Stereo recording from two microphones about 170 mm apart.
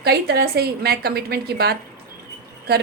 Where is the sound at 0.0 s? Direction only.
70° right (ahead or behind).